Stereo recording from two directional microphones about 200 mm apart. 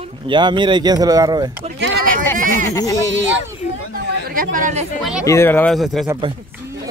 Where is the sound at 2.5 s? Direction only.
15° left (ahead or behind).